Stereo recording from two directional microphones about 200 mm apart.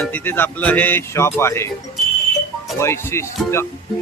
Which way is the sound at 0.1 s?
10° left (ahead or behind).